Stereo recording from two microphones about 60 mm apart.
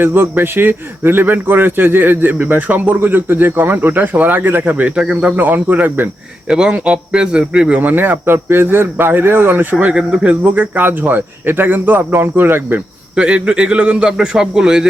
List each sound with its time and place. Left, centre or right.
0.0 s a man's voice: right
4.9 s a man's voice: centre
5.4 s a man's voice: right
6.5 s a man's voice: centre
7.8 s a man's voice: right
9.7 s a man's voice: centre; by 12.8 s right
13.1 s a man's voice: centre